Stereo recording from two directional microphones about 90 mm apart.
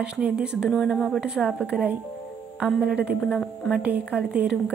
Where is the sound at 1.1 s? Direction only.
10° right (ahead or behind).